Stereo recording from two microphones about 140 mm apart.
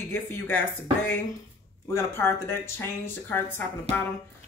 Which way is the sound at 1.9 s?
15° left (ahead or behind).